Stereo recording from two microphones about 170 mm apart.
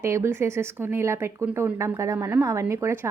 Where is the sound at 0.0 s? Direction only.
15° right (ahead or behind).